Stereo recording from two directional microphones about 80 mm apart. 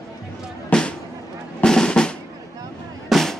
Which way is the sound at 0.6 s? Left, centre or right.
Centre.